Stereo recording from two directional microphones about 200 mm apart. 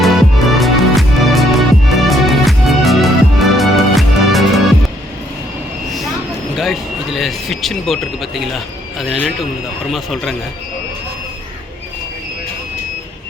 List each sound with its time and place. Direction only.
0.0 s music: centre (ahead or behind)
5.9 s vehicle: centre (ahead or behind)
6.6 s a man's voice: centre (ahead or behind)